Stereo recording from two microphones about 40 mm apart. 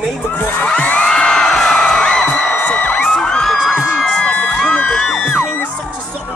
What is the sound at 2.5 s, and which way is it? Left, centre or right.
Music, left.